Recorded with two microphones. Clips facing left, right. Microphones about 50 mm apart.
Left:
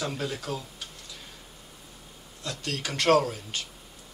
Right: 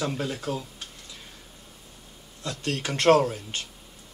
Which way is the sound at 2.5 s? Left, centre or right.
Right.